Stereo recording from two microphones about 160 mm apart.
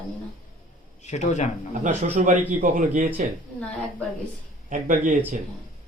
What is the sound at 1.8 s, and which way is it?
A man's voice, 50° right (ahead or behind).